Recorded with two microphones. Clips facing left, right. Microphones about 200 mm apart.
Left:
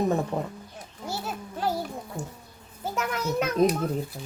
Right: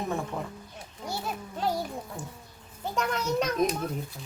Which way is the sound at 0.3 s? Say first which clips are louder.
Left 5 dB; 35° left (ahead or behind).